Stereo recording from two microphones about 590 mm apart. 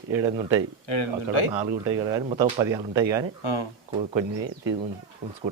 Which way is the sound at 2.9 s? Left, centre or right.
Right.